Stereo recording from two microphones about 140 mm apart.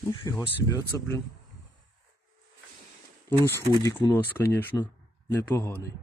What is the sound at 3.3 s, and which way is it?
Speech, 15° left (ahead or behind).